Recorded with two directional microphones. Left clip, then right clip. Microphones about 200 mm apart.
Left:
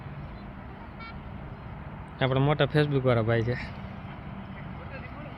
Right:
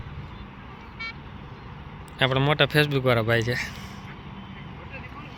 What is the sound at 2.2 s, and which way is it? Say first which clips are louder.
Speech: right 4 dB; centre (ahead or behind).